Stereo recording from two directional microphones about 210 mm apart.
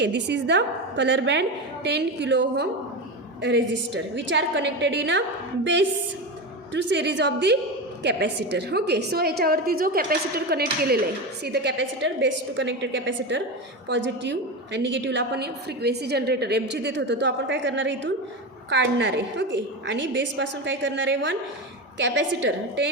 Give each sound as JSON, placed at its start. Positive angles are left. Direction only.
{"t": 0.0, "sound": "a woman's voice", "side_deg": -55}
{"t": 6.7, "sound": "a woman's voice", "side_deg": -55}